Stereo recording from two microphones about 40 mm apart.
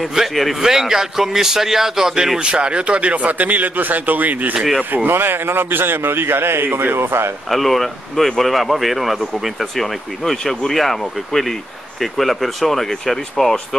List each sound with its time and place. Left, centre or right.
0.0 s a man's voice: centre
0.3 s speech: centre
0.6 s speech: centre; by 4.6 s right
4.9 s a man's voice: right
7.4 s speech: centre